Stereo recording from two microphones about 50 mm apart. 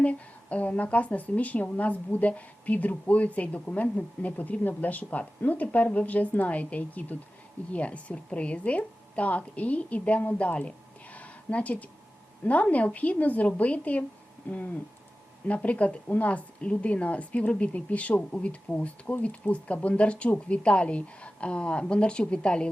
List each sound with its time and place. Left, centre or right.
0.0 s a woman's voice: left
10.3 s a sound: left
12.5 s a woman's voice: left